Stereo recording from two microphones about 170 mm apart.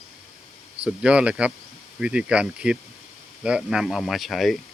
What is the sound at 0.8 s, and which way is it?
Speech, 5° right (ahead or behind).